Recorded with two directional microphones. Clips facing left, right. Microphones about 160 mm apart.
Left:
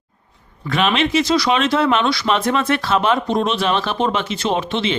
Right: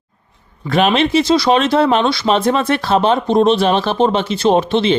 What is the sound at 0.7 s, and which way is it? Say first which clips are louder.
Speech: right 4 dB; 35° right (ahead or behind).